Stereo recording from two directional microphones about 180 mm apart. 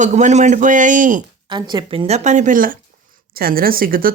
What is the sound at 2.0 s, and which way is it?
Speech, 40° right (ahead or behind).